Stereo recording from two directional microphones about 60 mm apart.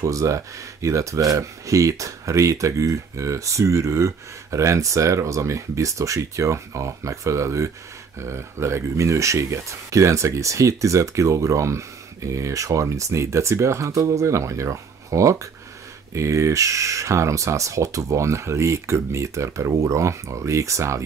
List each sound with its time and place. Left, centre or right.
0.0 s speech: right